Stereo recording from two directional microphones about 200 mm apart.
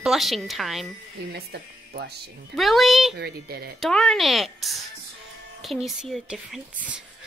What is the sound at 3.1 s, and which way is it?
Speech, 50° right (ahead or behind).